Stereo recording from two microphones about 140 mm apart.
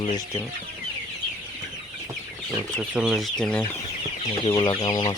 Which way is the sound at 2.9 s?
5° right (ahead or behind).